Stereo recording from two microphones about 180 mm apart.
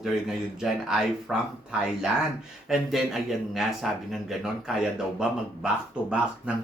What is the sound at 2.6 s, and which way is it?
Speech, centre (ahead or behind).